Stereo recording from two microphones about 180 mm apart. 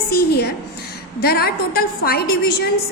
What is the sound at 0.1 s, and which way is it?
A woman's voice, 60° left (ahead or behind).